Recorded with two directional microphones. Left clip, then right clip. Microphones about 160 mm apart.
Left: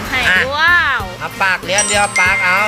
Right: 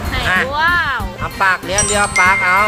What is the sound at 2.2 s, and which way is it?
Speech, 90° right.